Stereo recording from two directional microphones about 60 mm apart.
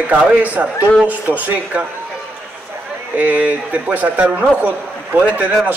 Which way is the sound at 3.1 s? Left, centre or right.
Right.